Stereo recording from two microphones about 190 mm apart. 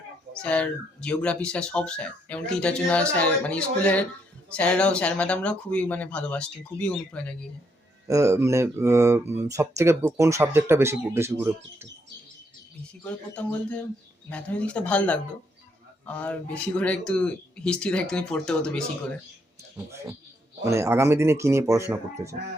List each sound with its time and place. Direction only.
0.3 s speech: 5° left (ahead or behind)
8.0 s speech: 15° right (ahead or behind)
13.1 s speech: 5° left (ahead or behind)
20.7 s speech: 15° right (ahead or behind)